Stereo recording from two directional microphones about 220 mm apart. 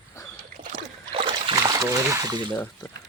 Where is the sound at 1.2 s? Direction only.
25° right (ahead or behind).